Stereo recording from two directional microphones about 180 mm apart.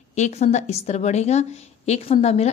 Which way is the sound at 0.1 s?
40° left (ahead or behind).